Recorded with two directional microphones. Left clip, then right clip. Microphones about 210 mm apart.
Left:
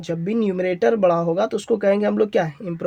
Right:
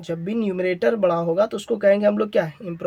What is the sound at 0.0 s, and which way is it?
Speech, 30° left (ahead or behind).